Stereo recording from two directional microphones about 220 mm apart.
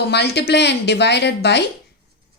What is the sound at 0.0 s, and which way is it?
A woman's voice, 50° left (ahead or behind).